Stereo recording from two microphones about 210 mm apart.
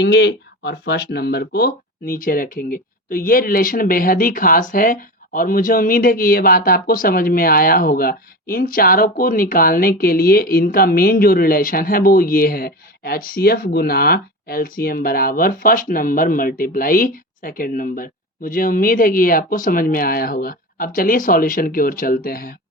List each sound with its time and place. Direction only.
0.0 s speech: 50° left (ahead or behind)